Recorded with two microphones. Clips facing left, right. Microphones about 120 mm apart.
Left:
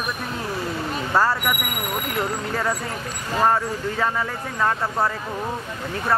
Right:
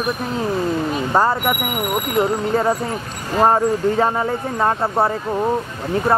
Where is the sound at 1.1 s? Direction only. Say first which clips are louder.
Right 3 dB; 20° right (ahead or behind).